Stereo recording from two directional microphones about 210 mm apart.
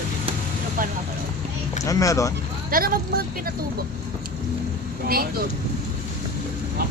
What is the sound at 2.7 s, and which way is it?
Speech, 45° right (ahead or behind).